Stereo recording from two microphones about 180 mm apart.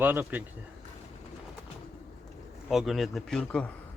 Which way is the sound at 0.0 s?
10° right (ahead or behind).